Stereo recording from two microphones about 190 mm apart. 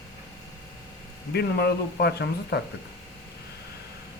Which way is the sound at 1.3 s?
60° left (ahead or behind).